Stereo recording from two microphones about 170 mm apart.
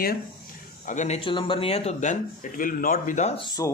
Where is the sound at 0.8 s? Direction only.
45° left (ahead or behind).